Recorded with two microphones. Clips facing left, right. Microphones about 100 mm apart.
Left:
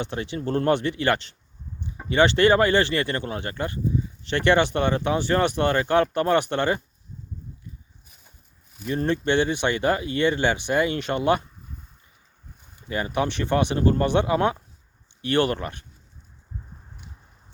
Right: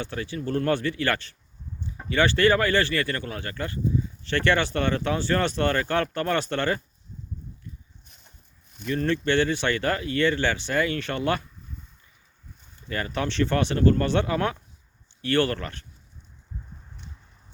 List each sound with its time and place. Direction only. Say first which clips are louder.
0.0 s speech: left 2 dB; 20° left (ahead or behind)
8.0 s a sound: even; 5° left (ahead or behind)
9.0 s speech: left 1 dB; 20° left (ahead or behind)
12.9 s speech: left 3 dB; 15° left (ahead or behind)